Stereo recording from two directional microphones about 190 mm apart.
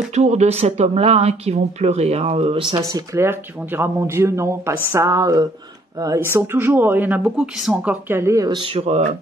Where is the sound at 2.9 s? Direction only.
15° right (ahead or behind).